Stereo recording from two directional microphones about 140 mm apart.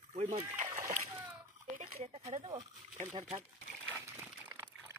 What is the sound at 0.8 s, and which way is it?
Splash, 60° right (ahead or behind).